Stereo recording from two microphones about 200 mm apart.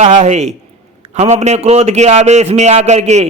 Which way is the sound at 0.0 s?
35° right (ahead or behind).